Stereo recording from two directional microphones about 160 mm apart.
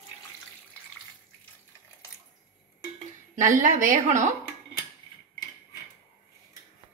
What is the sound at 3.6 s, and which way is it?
Speech, 55° right (ahead or behind).